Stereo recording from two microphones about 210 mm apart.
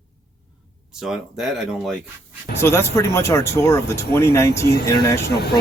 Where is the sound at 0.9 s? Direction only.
Centre (ahead or behind).